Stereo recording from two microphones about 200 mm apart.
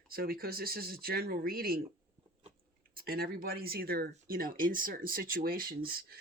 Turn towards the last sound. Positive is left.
turn(degrees=-50)  # may be behind; listen again after turning